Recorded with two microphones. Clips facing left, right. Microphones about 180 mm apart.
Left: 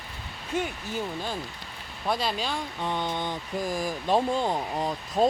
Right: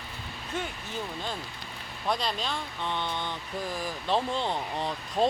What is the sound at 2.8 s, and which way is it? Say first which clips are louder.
Mantra: left 3 dB; 45° left (ahead or behind).